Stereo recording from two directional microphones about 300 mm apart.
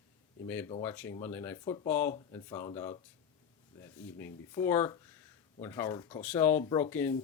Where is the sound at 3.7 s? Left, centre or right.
Centre.